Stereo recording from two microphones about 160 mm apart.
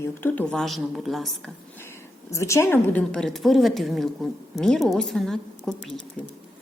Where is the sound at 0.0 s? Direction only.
10° left (ahead or behind).